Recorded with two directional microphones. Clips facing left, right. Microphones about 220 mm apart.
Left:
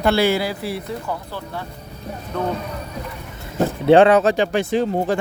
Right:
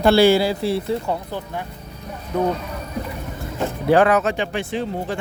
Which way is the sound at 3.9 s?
25° left (ahead or behind).